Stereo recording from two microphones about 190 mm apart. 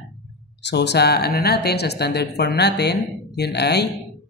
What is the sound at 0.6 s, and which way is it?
A man's voice, 65° left (ahead or behind).